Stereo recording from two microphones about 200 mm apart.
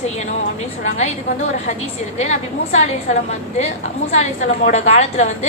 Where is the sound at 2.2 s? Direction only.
35° left (ahead or behind).